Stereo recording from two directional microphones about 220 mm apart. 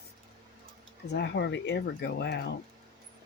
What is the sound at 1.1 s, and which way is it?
Speech, 50° left (ahead or behind).